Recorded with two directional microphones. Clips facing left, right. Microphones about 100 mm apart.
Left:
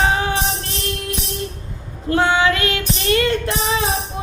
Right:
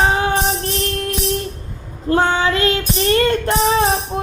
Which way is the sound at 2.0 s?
35° right (ahead or behind).